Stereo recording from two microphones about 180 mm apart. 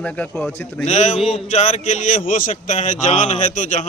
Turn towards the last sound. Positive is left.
turn(degrees=45)  # may be behind; listen again after turning